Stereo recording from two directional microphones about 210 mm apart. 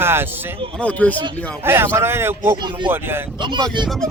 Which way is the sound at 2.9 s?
10° right (ahead or behind).